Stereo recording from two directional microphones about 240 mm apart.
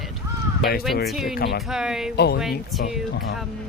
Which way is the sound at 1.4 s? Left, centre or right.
Left.